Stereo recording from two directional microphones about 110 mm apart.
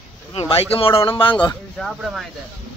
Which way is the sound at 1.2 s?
50° left (ahead or behind).